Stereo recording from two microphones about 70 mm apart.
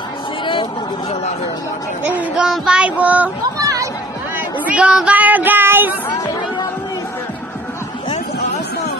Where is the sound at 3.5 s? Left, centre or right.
Right.